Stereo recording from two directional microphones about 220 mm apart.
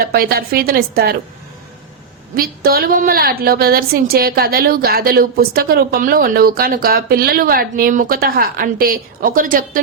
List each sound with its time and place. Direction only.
0.0 s a woman's voice: 45° right (ahead or behind)
2.3 s a woman's voice: 40° right (ahead or behind)